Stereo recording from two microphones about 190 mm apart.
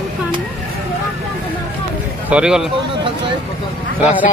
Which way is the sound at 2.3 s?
5° right (ahead or behind).